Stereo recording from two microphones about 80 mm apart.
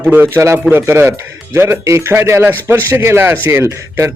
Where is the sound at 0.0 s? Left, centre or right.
Right.